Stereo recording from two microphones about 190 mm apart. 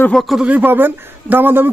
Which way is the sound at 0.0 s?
Centre (ahead or behind).